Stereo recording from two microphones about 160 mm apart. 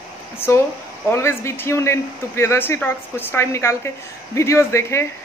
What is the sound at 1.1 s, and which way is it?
A woman's voice, 15° left (ahead or behind).